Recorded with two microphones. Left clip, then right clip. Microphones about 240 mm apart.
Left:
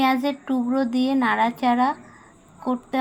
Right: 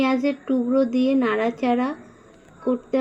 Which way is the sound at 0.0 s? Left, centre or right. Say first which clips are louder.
Left 1 dB; left.